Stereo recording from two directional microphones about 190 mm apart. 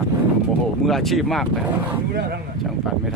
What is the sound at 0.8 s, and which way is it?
Speech, centre (ahead or behind).